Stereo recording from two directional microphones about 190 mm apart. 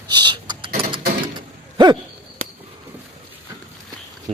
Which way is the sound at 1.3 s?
20° right (ahead or behind).